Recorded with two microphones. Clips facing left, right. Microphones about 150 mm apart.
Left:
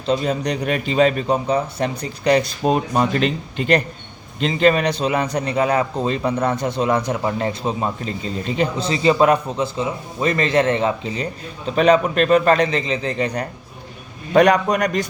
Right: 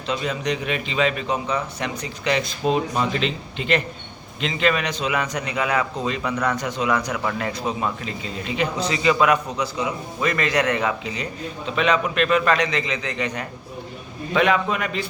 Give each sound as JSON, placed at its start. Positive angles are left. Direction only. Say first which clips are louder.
{"t": 0.1, "sound": "a man's voice", "louder": "left 5 dB", "side_deg": 35}